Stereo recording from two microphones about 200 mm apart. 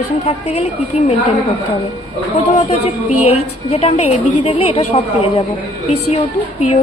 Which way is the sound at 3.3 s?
30° left (ahead or behind).